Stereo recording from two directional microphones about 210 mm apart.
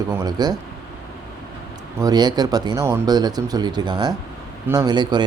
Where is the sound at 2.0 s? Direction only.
20° right (ahead or behind).